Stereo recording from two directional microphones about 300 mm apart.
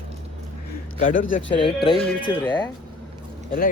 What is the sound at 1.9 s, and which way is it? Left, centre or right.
Speech, centre.